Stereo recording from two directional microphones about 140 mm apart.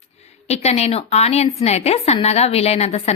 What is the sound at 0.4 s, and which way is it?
A woman's voice, 50° left (ahead or behind).